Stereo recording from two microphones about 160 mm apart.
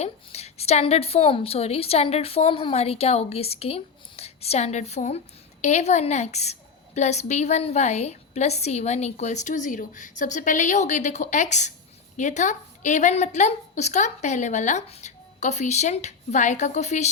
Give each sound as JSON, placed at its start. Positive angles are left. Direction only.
{"t": 0.0, "sound": "a woman's voice", "side_deg": 40}